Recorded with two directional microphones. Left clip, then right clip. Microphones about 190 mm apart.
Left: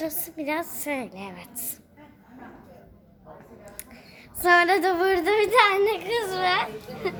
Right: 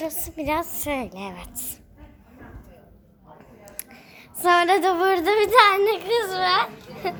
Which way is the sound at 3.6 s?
20° right (ahead or behind).